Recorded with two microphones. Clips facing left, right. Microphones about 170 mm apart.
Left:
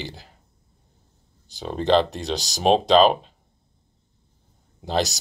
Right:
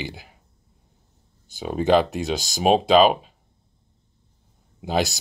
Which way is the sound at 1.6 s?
10° right (ahead or behind).